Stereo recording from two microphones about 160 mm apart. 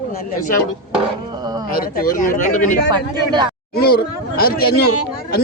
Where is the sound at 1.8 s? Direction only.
60° left (ahead or behind).